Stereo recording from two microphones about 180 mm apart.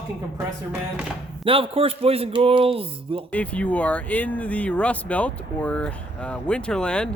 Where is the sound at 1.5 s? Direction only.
30° right (ahead or behind).